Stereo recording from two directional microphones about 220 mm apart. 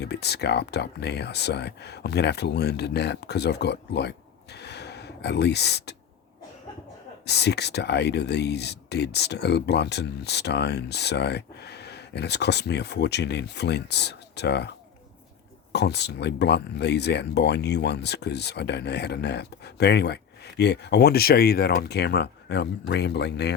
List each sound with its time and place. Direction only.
0.0 s speech: 50° left (ahead or behind)
4.5 s a sound: 50° left (ahead or behind)
7.3 s speech: 50° left (ahead or behind)
15.7 s speech: 50° left (ahead or behind)